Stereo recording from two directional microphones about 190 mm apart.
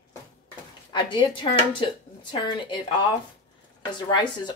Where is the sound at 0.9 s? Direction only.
25° left (ahead or behind).